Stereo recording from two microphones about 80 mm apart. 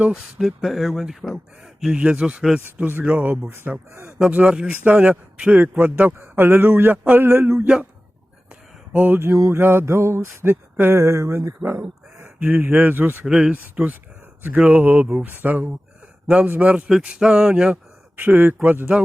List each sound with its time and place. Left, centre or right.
0.1 s a man's voice: centre
3.4 s a man's voice: right
4.2 s a man's voice: centre
8.9 s speech: centre
9.1 s a sound: right
11.6 s sheep: right
12.4 s a man's voice: right
13.2 s a man's voice: centre